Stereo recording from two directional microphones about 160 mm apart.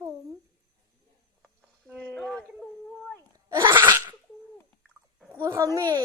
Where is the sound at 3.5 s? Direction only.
30° right (ahead or behind).